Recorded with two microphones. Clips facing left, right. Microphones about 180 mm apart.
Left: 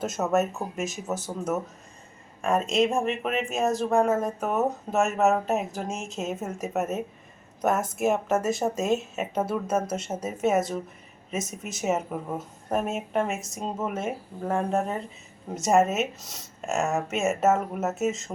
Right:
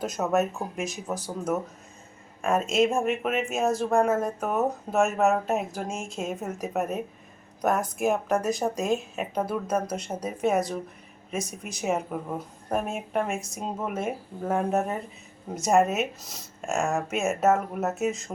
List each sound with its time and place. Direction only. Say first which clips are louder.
0.0 s speech: even; centre (ahead or behind)